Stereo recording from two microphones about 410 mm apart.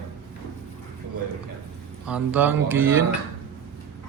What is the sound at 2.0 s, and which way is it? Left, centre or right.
Speech, centre.